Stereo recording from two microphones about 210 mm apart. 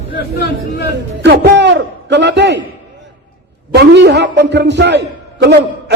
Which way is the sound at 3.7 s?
55° right (ahead or behind).